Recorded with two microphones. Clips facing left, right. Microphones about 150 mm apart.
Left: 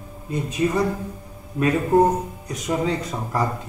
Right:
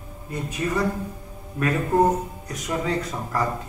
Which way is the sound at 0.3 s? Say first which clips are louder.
Left 4 dB; 20° left (ahead or behind).